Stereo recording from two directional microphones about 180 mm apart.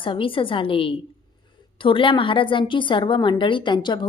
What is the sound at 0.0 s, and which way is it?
A woman's voice, 30° left (ahead or behind).